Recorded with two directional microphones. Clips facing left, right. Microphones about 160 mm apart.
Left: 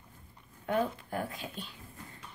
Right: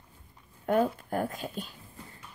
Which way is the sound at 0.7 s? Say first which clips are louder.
Right 5 dB; 45° right (ahead or behind).